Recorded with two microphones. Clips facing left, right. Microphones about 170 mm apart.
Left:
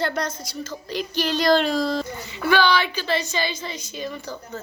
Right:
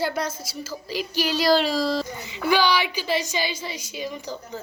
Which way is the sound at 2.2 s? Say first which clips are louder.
Left 2 dB; 15° right (ahead or behind).